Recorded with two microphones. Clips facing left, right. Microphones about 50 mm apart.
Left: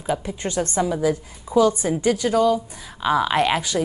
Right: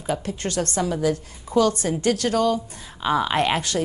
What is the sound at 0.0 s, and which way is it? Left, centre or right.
A woman's voice, centre.